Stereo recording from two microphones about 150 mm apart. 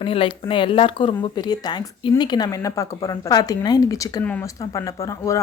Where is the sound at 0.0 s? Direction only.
35° left (ahead or behind).